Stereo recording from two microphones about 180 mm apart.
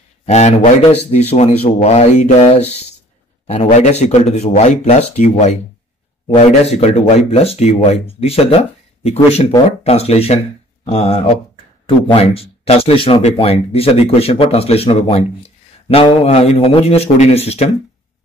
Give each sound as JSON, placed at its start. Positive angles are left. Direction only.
{"t": 0.2, "sound": "speech", "side_deg": 40}